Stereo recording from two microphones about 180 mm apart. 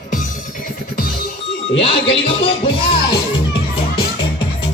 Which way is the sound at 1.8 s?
30° left (ahead or behind).